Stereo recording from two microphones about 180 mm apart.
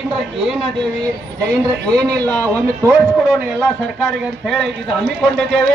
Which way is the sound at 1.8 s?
65° right (ahead or behind).